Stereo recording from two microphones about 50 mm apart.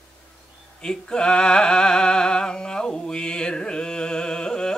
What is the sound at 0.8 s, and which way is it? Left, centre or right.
Music, centre.